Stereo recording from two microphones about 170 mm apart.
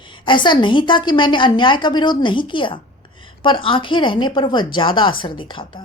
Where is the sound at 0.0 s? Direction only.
30° left (ahead or behind).